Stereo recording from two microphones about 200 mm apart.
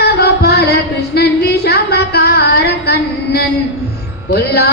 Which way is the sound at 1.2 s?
55° left (ahead or behind).